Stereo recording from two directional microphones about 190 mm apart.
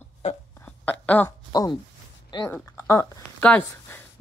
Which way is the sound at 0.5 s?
10° left (ahead or behind).